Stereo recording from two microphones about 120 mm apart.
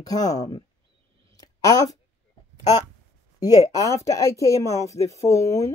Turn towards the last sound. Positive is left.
turn(degrees=25)  # may be behind; listen again after turning